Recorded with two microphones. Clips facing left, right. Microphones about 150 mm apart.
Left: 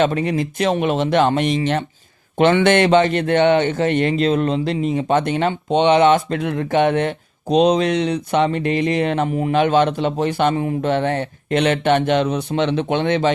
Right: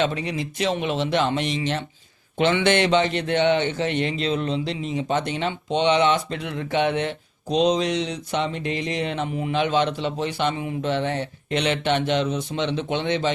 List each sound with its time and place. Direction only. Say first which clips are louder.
0.0 s a man's voice: left 6 dB; 50° left (ahead or behind)